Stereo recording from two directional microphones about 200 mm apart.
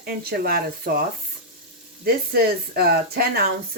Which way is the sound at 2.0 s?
50° right (ahead or behind).